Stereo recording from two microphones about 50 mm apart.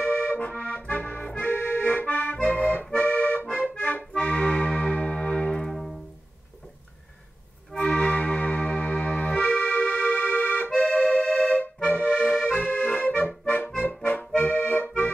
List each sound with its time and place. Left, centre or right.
0.0 s accordion: left
2.3 s accordion: left
4.2 s music: left
5.7 s music: centre
7.7 s music: centre; by 10.7 s left
11.1 s music: left
11.8 s accordion: left
14.3 s accordion: left